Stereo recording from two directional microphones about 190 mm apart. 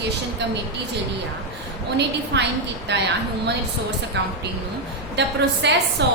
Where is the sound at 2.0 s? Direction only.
65° right (ahead or behind).